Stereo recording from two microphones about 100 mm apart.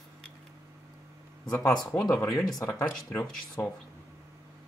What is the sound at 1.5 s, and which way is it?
Speech, 25° left (ahead or behind).